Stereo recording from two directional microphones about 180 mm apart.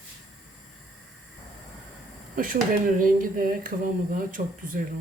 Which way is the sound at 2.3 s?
50° right (ahead or behind).